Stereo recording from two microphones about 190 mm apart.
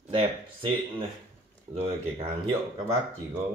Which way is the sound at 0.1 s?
25° right (ahead or behind).